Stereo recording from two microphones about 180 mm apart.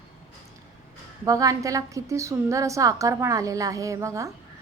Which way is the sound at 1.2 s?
20° right (ahead or behind).